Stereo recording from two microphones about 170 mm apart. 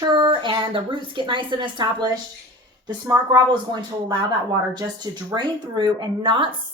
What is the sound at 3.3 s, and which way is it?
A woman's voice, 25° right (ahead or behind).